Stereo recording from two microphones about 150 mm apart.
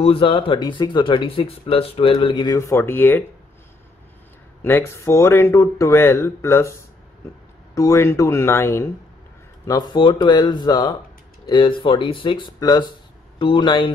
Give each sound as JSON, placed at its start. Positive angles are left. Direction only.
{"t": 0.0, "sound": "speech", "side_deg": 35}
{"t": 4.6, "sound": "speech", "side_deg": 15}
{"t": 7.7, "sound": "speech", "side_deg": 20}
{"t": 9.7, "sound": "speech", "side_deg": 30}